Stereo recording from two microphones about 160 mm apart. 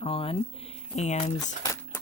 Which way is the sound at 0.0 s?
35° left (ahead or behind).